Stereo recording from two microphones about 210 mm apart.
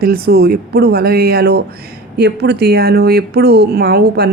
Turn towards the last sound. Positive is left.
turn(degrees=-50)  # may be behind; listen again after turning